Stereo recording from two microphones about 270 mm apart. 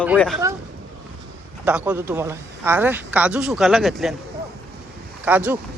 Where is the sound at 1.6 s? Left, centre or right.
Centre.